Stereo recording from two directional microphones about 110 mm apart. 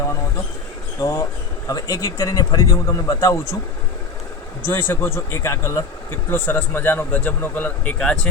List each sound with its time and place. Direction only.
1.0 s speech: 30° left (ahead or behind)
4.6 s speech: 20° left (ahead or behind)